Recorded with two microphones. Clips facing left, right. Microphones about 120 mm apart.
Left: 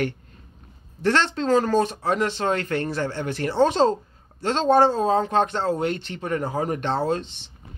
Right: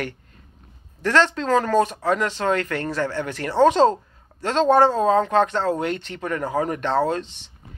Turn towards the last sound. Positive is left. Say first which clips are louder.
# right 2 dB
turn(degrees=25)  # may be behind; listen again after turning